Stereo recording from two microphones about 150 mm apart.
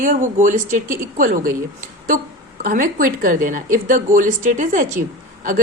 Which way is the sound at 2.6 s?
65° right (ahead or behind).